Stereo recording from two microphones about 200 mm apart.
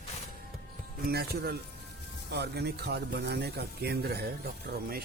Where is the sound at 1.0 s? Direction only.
50° right (ahead or behind).